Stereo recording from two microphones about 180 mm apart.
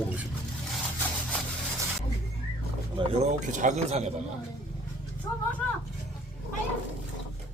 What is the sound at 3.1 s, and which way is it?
A man's voice, 45° right (ahead or behind).